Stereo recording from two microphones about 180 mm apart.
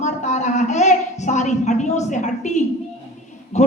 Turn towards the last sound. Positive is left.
turn(degrees=40)  # may be behind; listen again after turning